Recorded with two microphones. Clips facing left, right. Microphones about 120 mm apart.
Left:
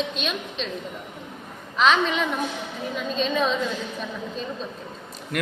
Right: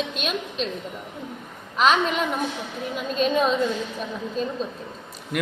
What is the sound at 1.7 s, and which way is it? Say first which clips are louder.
Speech: even; 5° right (ahead or behind).